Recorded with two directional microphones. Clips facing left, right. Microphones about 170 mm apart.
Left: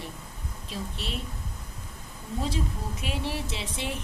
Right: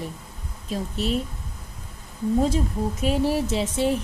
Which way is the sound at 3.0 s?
40° right (ahead or behind).